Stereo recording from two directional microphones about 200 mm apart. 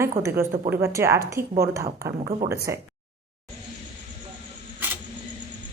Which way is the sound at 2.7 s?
15° right (ahead or behind).